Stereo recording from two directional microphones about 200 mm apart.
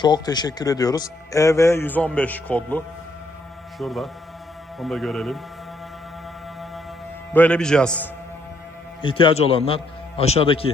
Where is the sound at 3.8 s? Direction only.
Centre (ahead or behind).